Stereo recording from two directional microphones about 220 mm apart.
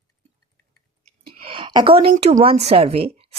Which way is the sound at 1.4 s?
20° right (ahead or behind).